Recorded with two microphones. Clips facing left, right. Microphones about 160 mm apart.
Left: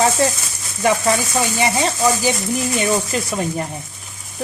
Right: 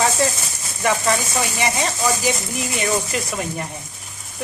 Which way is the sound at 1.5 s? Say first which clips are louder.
Left 5 dB; 30° left (ahead or behind).